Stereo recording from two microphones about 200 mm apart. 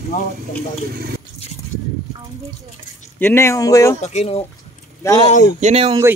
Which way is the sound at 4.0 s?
35° left (ahead or behind).